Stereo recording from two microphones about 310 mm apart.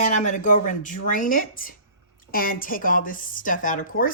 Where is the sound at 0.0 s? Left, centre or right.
Left.